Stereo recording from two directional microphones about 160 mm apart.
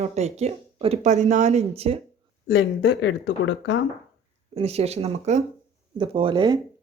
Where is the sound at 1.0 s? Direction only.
50° right (ahead or behind).